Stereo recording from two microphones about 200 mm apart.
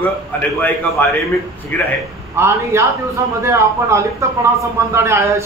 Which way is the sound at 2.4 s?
15° right (ahead or behind).